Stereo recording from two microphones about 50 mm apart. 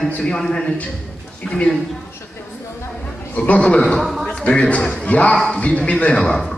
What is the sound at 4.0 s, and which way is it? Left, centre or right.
Speech, centre.